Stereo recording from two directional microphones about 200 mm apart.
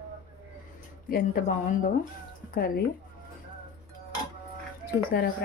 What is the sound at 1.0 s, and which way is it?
Speech, 45° left (ahead or behind).